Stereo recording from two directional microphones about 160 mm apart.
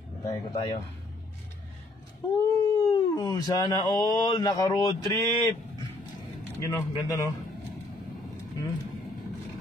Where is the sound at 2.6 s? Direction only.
25° left (ahead or behind).